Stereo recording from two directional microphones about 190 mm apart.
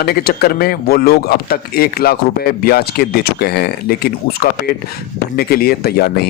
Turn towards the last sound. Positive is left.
turn(degrees=55)  # may be behind; listen again after turning